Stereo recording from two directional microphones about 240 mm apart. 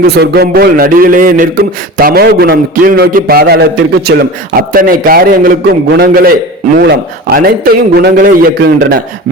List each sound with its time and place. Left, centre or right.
0.0 s a man's voice: right